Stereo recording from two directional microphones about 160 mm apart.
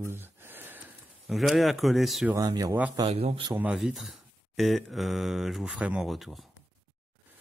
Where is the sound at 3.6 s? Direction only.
5° right (ahead or behind).